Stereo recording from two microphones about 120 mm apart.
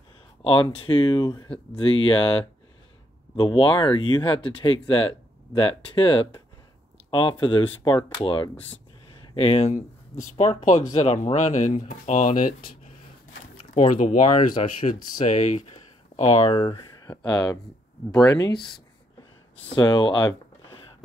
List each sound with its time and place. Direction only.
0.4 s speech: 45° left (ahead or behind); by 12.5 s 90° left
13.7 s speech: 90° left
14.5 s speech: 45° left (ahead or behind)
14.9 s speech: 85° left
16.2 s speech: 65° left (ahead or behind); by 16.8 s 50° left (ahead or behind)
17.0 s speech: 35° left (ahead or behind)
19.7 s speech: 40° left (ahead or behind)